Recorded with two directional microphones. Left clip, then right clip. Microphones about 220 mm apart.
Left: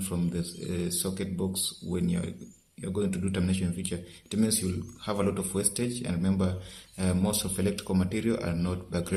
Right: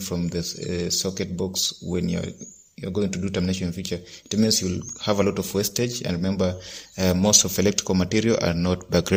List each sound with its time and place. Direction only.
0.1 s speech: 30° right (ahead or behind)